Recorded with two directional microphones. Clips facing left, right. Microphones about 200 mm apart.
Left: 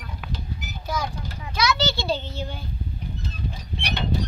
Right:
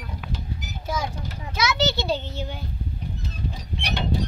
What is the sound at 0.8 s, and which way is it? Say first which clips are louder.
A child's voice: even; 25° right (ahead or behind).